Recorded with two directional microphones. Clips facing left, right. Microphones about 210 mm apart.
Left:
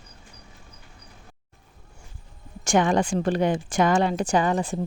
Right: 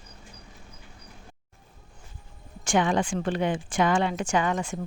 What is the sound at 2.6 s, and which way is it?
A woman's voice, 45° left (ahead or behind).